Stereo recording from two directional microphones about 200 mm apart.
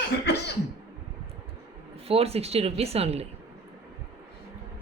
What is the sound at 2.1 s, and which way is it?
A woman's voice, 30° right (ahead or behind).